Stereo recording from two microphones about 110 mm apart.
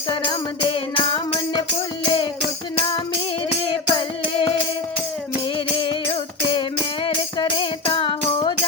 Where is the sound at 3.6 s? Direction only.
50° left (ahead or behind).